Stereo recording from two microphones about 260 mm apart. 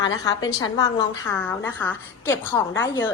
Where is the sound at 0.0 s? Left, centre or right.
Centre.